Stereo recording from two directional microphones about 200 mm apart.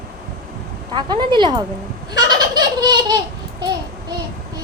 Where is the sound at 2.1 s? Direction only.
20° right (ahead or behind).